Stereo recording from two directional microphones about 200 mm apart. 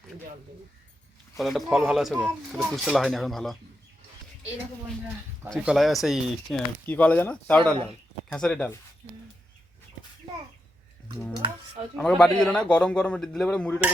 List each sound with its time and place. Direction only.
1.4 s a man's voice: centre (ahead or behind)
5.5 s a man's voice: centre (ahead or behind)
11.4 s speech: 25° right (ahead or behind)
11.9 s a man's voice: 5° left (ahead or behind)